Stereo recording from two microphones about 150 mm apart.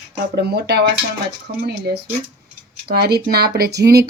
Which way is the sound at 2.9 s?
90° right.